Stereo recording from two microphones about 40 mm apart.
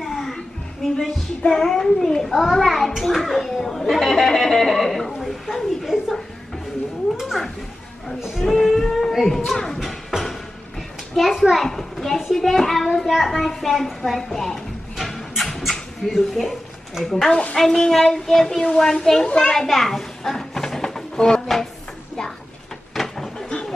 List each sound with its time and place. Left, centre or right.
0.0 s music: centre
1.4 s a child's voice: centre
7.2 s a child's voice: centre
10.1 s music: centre
11.1 s a child's voice: centre
11.6 s a sound: centre
12.2 s a child's voice: centre
15.0 s a sound: centre
16.1 s a child's voice: centre
17.3 s a woman's voice: left
17.6 s a child's voice: centre
19.7 s a sound: centre
22.9 s a sound: centre